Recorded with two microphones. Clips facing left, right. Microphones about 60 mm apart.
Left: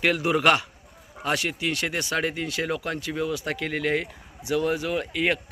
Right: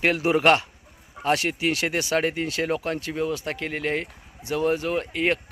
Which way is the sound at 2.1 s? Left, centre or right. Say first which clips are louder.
Right 3 dB; right.